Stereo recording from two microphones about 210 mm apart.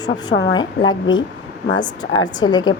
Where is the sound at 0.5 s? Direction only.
20° left (ahead or behind).